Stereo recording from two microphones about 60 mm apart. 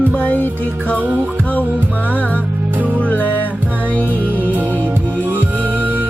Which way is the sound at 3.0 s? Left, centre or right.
Left.